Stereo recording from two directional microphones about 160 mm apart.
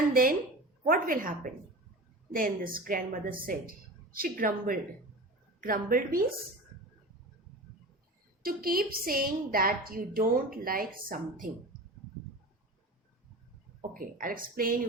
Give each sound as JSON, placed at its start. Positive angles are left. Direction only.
{"t": 0.1, "sound": "a woman's voice", "side_deg": -65}
{"t": 8.4, "sound": "a woman's voice", "side_deg": -65}
{"t": 14.0, "sound": "a woman's voice", "side_deg": -60}